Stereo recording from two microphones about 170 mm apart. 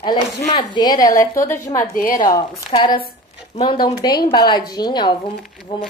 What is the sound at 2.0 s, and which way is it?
Speech, 55° left (ahead or behind).